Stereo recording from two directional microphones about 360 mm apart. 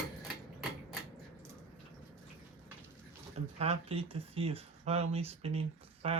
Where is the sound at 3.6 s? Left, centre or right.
Centre.